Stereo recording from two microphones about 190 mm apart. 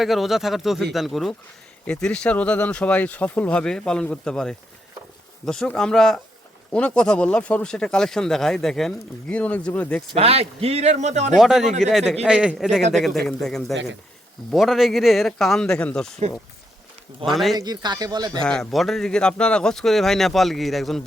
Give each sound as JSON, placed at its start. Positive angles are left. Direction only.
{"t": 0.0, "sound": "a man's voice", "side_deg": 0}
{"t": 10.2, "sound": "speech", "side_deg": -30}
{"t": 11.3, "sound": "a man's voice", "side_deg": 0}
{"t": 17.3, "sound": "a man's voice", "side_deg": 0}
{"t": 17.6, "sound": "speech", "side_deg": -20}
{"t": 18.3, "sound": "a man's voice", "side_deg": 5}